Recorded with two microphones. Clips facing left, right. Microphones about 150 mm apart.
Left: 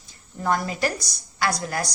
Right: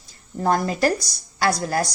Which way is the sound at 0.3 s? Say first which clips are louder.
Right 4 dB; 40° right (ahead or behind).